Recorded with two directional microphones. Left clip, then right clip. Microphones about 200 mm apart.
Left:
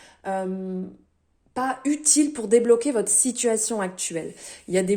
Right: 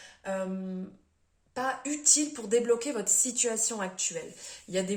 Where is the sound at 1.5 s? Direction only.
40° left (ahead or behind).